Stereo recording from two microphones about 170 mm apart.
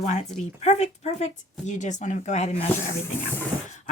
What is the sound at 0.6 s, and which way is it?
Speech, 40° left (ahead or behind).